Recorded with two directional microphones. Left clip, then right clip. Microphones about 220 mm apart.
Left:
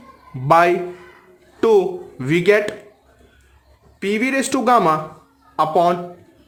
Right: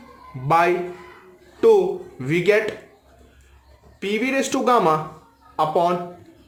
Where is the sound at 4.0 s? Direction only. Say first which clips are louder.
Left 2 dB; 35° left (ahead or behind).